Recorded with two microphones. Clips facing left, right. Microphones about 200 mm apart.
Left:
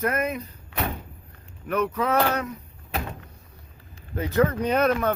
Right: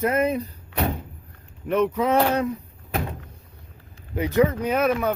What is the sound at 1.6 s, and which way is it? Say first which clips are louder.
Speech: right 4 dB; 25° right (ahead or behind).